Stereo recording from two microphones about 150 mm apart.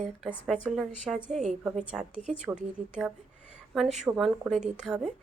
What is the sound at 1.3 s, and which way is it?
Speech, 50° right (ahead or behind).